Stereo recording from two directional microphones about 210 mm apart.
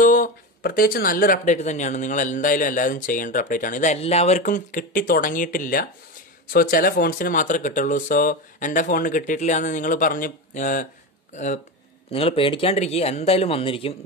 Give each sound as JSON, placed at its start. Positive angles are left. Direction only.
{"t": 0.0, "sound": "speech", "side_deg": 40}